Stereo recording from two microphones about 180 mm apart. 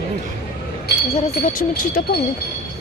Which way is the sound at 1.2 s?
50° left (ahead or behind).